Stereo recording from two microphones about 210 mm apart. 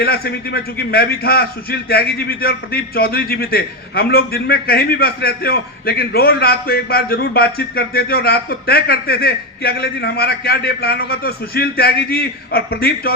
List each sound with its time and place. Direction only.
0.0 s a man's voice: 45° left (ahead or behind)